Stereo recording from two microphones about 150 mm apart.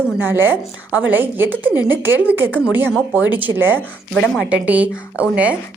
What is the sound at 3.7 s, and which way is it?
Speech, 5° left (ahead or behind).